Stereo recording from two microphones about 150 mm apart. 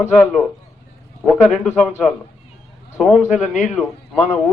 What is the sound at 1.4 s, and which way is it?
A man's voice, 5° left (ahead or behind).